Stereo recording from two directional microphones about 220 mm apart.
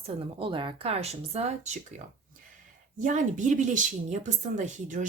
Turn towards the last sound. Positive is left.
turn(degrees=-35)  # may be behind; listen again after turning